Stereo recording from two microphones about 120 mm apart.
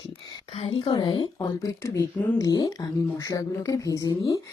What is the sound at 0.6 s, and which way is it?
Speech, 50° left (ahead or behind).